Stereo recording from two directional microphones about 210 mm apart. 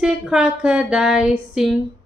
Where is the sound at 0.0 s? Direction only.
5° right (ahead or behind).